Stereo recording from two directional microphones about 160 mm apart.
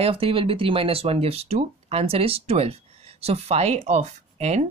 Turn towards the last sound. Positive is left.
turn(degrees=-45)  # may be behind; listen again after turning